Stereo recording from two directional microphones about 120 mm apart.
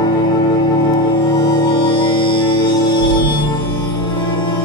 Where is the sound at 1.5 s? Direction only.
45° left (ahead or behind).